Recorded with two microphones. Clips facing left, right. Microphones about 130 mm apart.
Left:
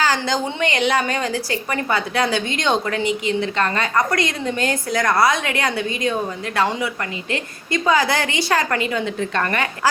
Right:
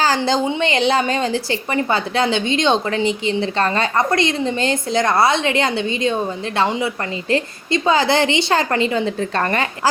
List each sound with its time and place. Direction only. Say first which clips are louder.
0.2 s a woman's voice: right 4 dB; 25° right (ahead or behind)